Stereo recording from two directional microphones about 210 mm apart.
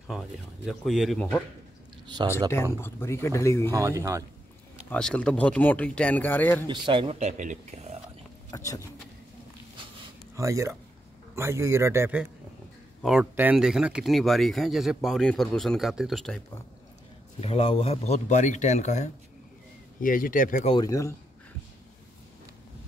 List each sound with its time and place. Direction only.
0.7 s speech: centre (ahead or behind)
2.5 s speech: 10° left (ahead or behind)
3.7 s a man's voice: 15° right (ahead or behind)
4.8 s speech: 5° left (ahead or behind)
6.7 s speech: 25° right (ahead or behind)
8.5 s speech: 15° left (ahead or behind)
10.3 s a man's voice: 15° right (ahead or behind)
17.4 s speech: 30° left (ahead or behind)
20.7 s speech: 15° left (ahead or behind)